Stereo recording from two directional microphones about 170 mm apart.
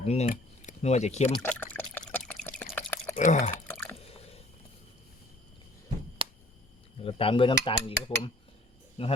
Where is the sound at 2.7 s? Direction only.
10° left (ahead or behind).